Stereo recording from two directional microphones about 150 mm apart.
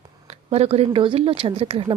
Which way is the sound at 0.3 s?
45° right (ahead or behind).